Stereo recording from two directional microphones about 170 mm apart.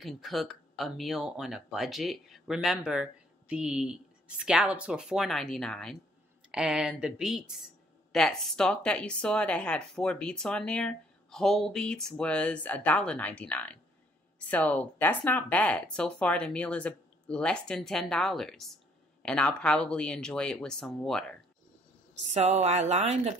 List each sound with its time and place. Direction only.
0.0 s speech: centre (ahead or behind)
22.3 s speech: 40° right (ahead or behind)